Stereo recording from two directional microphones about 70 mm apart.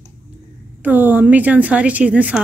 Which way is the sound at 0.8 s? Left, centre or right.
Right.